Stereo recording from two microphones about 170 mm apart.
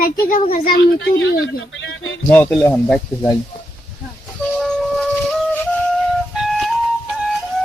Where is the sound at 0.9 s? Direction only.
80° left.